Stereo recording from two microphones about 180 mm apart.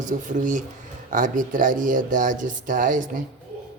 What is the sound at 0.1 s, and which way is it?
Speech, 45° right (ahead or behind).